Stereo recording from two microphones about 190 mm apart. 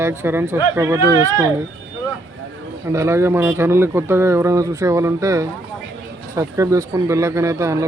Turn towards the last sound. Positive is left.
turn(degrees=-15)  # may be behind; listen again after turning